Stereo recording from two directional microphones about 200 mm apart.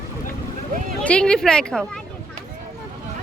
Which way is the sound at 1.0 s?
5° left (ahead or behind).